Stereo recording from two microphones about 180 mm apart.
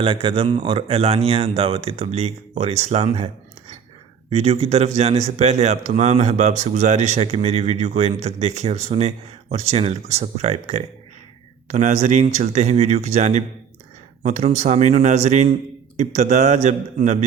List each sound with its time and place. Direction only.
0.0 s speech: 30° right (ahead or behind)
4.3 s speech: 35° right (ahead or behind)